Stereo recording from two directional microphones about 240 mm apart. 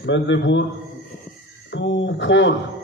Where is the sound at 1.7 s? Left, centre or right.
Left.